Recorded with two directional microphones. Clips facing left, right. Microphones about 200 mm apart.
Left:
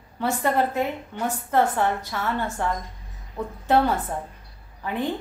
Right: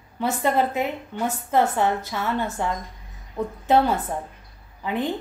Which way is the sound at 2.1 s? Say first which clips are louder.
Right 1 dB; 10° right (ahead or behind).